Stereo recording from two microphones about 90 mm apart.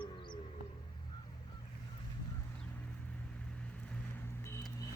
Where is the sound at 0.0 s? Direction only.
60° left (ahead or behind).